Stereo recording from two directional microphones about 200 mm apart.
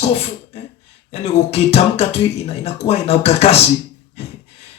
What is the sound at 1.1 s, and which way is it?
A man's voice, 30° left (ahead or behind).